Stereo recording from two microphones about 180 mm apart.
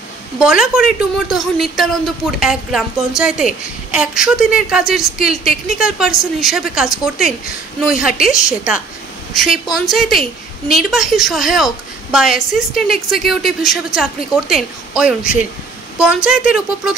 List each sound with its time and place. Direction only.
0.4 s a woman's voice: 5° right (ahead or behind)
16.3 s a woman's voice: 5° right (ahead or behind)